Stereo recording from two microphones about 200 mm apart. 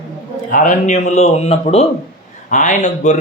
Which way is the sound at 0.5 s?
40° left (ahead or behind).